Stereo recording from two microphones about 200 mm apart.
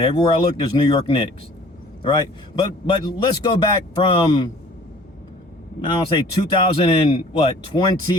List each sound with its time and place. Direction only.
0.0 s speech: 25° left (ahead or behind)
5.8 s speech: 25° left (ahead or behind)